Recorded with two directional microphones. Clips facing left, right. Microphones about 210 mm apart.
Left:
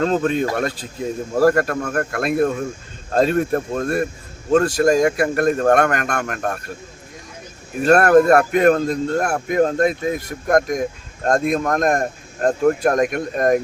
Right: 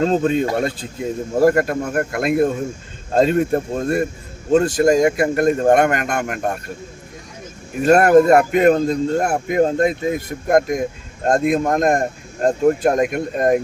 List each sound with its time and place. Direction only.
0.0 s a man's voice: 25° right (ahead or behind)
7.9 s a man's voice: 20° right (ahead or behind)